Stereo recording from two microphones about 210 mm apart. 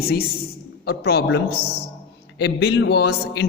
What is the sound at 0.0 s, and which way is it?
A man's voice, 45° left (ahead or behind).